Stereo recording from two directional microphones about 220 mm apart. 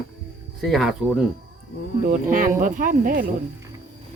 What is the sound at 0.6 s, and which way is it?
Speech, centre (ahead or behind).